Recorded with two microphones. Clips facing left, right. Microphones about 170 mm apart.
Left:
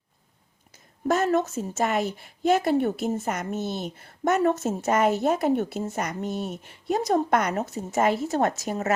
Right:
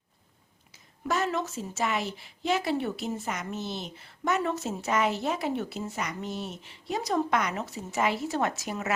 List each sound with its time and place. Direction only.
0.7 s a woman's voice: 45° left (ahead or behind)